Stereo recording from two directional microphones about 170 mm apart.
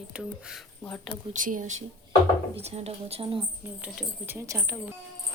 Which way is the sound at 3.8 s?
10° right (ahead or behind).